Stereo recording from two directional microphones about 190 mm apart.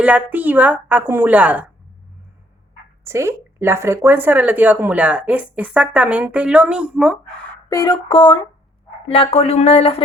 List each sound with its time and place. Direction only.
0.0 s speech: 10° right (ahead or behind)
3.0 s speech: 15° right (ahead or behind)
7.7 s a sound: 20° left (ahead or behind)
9.0 s speech: 30° left (ahead or behind)